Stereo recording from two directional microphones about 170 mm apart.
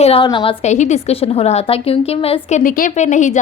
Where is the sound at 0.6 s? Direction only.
45° left (ahead or behind).